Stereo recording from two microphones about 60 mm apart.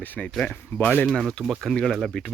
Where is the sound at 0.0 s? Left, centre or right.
Left.